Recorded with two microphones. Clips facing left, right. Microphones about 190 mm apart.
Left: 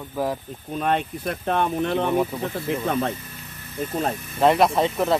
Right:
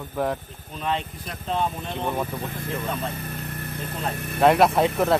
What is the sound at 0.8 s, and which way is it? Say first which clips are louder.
Speech: left 4 dB; 55° left (ahead or behind).